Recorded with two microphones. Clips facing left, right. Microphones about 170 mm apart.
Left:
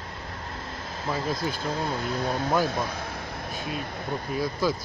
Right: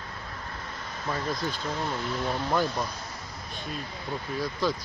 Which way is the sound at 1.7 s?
40° left (ahead or behind).